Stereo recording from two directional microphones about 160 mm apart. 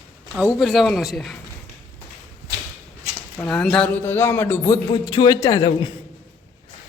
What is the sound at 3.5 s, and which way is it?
A man's voice, 5° left (ahead or behind).